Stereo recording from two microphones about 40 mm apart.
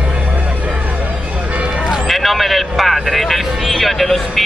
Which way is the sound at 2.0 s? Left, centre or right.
Centre.